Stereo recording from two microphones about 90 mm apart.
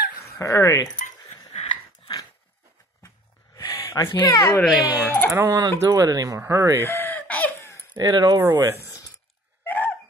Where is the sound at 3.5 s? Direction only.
40° left (ahead or behind).